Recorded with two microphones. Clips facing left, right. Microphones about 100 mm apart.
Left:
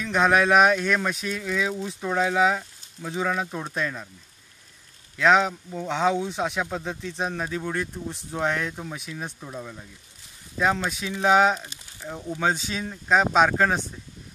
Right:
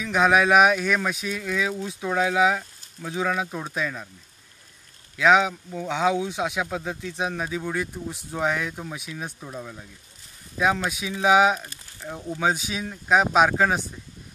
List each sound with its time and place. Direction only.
0.0 s speech: 5° right (ahead or behind)
5.1 s speech: 5° right (ahead or behind)
11.6 s crumpling: 15° left (ahead or behind)
12.4 s speech: 5° right (ahead or behind)